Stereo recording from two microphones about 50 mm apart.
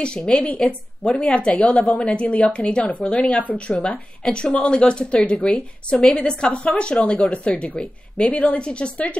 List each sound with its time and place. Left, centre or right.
0.0 s a woman's voice: centre